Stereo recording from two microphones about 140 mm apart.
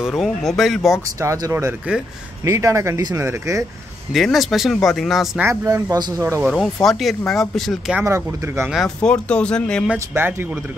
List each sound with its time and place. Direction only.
0.0 s speech: centre (ahead or behind)
1.0 s speech: 20° right (ahead or behind)
4.1 s speech: centre (ahead or behind)
5.4 s speech: 20° right (ahead or behind)
6.5 s speech: centre (ahead or behind)
8.0 s speech: 20° right (ahead or behind)
8.6 s speech: centre (ahead or behind)
9.9 s speech: 15° right (ahead or behind)